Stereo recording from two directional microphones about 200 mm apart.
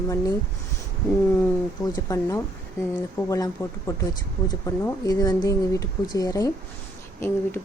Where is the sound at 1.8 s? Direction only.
15° left (ahead or behind).